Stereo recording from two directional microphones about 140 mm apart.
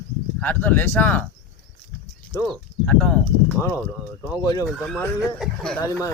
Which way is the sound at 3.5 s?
20° left (ahead or behind).